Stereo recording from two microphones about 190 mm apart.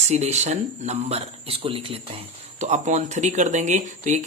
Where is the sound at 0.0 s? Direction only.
35° right (ahead or behind).